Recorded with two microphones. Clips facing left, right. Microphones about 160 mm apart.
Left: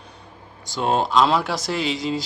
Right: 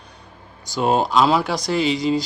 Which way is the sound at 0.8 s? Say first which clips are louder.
Right 2 dB; 5° right (ahead or behind).